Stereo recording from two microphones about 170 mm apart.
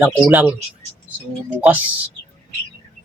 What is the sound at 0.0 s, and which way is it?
Speech, 10° right (ahead or behind).